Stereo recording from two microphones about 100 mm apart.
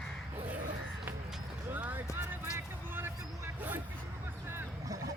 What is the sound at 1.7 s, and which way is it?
Music, 20° right (ahead or behind).